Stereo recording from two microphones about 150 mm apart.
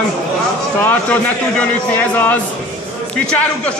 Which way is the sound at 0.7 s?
10° left (ahead or behind).